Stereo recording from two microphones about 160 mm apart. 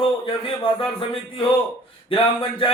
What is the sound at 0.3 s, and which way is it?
A man's voice, 35° left (ahead or behind).